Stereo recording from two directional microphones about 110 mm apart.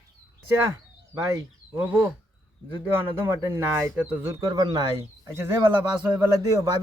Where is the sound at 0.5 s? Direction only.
20° right (ahead or behind).